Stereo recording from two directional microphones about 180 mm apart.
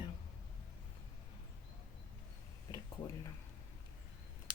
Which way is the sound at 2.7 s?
25° left (ahead or behind).